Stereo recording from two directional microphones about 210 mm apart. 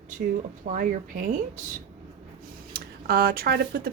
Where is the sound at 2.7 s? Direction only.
45° right (ahead or behind).